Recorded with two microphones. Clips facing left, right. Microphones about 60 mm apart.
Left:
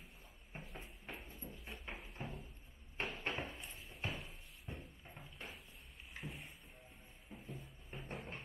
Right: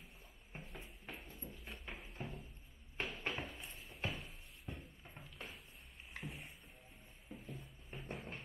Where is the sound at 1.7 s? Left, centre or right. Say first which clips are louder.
Left 2 dB; centre.